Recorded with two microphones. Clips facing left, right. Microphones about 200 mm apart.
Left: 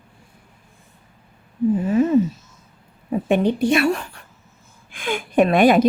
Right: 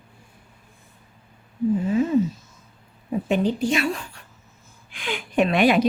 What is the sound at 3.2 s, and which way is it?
Speech, 60° left (ahead or behind).